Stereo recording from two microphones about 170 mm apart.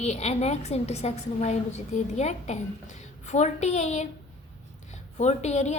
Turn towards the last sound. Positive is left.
turn(degrees=40)  # may be behind; listen again after turning